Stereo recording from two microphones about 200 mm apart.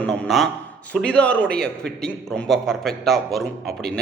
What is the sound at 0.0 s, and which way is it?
Speech, centre (ahead or behind).